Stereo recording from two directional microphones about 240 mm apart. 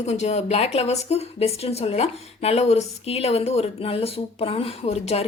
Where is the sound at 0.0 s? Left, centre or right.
Left.